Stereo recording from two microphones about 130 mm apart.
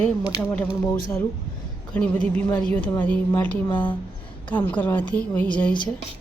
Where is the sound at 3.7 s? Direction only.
40° left (ahead or behind).